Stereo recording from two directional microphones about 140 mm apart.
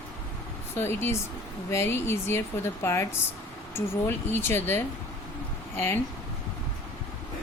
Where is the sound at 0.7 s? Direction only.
15° left (ahead or behind).